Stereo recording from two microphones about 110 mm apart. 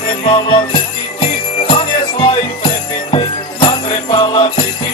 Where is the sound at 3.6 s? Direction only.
55° left (ahead or behind).